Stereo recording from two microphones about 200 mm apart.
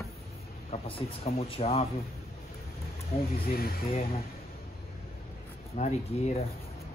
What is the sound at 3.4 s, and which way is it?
Speech, 50° left (ahead or behind).